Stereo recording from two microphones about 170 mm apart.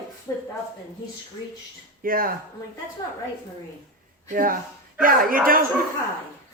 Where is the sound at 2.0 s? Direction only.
55° right (ahead or behind).